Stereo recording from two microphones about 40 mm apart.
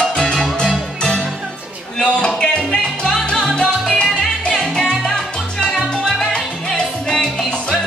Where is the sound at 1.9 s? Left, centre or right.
Left.